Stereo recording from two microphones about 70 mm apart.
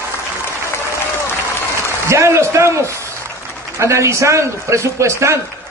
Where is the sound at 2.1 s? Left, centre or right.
Right.